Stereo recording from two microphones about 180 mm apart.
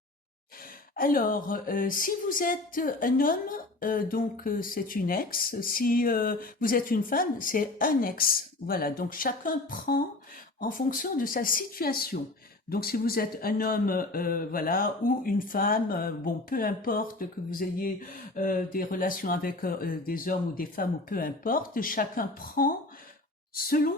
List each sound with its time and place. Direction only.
0.9 s a woman's voice: 50° left (ahead or behind)